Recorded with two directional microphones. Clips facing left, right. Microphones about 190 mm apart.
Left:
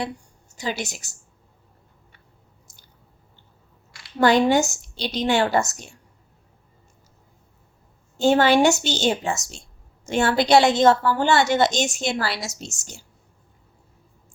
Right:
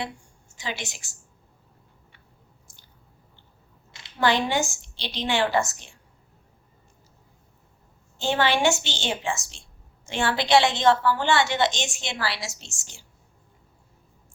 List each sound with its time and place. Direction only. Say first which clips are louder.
0.5 s a woman's voice: left 6 dB; 40° left (ahead or behind)
4.2 s a woman's voice: left 6 dB; 45° left (ahead or behind)
8.2 s a woman's voice: left 6 dB; 40° left (ahead or behind)